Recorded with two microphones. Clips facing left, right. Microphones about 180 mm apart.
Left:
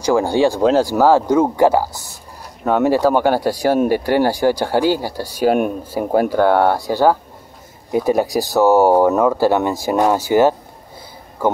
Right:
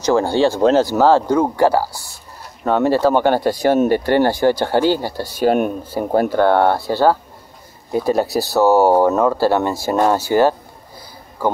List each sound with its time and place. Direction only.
0.0 s speech: 15° left (ahead or behind)